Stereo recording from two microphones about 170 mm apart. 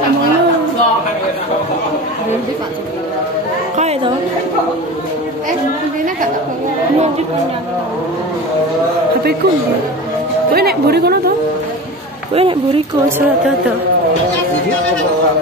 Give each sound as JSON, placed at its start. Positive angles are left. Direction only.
{"t": 10.5, "sound": "speech", "side_deg": -65}
{"t": 12.4, "sound": "speech", "side_deg": -30}